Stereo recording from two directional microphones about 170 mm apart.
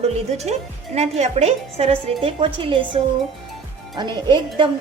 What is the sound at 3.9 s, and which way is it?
Speech, 25° right (ahead or behind).